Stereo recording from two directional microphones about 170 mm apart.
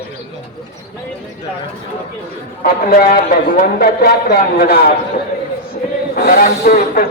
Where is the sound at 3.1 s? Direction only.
60° left (ahead or behind).